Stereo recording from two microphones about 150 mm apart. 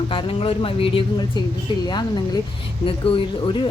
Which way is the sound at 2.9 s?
35° left (ahead or behind).